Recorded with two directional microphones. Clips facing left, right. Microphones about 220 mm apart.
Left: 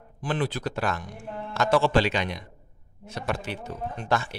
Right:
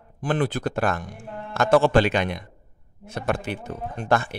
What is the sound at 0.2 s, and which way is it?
Speech, 50° right (ahead or behind).